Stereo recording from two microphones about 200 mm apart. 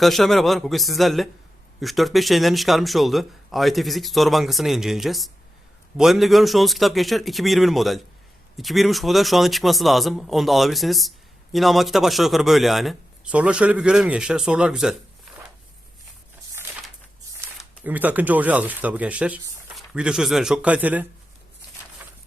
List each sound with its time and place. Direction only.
0.0 s speech: centre (ahead or behind)
17.6 s speech: 10° right (ahead or behind)